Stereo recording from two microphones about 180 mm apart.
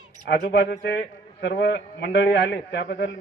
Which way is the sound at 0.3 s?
70° left (ahead or behind).